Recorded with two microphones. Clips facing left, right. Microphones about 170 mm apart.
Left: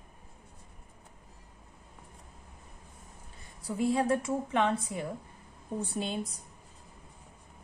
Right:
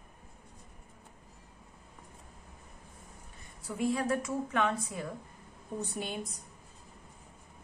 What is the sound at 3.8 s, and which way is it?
A woman's voice, 30° left (ahead or behind).